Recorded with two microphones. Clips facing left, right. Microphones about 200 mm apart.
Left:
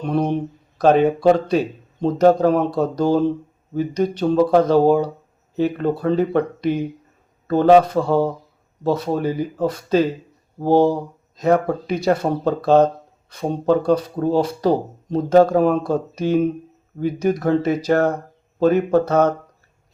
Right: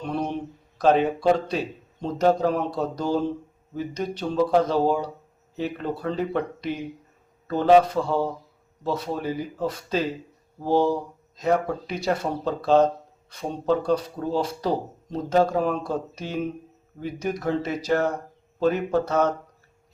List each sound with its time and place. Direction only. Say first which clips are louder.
0.1 s speech: left 8 dB; 60° left (ahead or behind)
4.2 s speech: left 5 dB; 55° left (ahead or behind)